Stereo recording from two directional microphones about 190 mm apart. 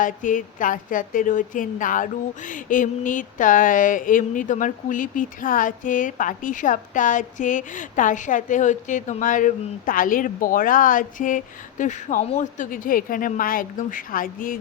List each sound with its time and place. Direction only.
0.0 s a woman's voice: 45° left (ahead or behind)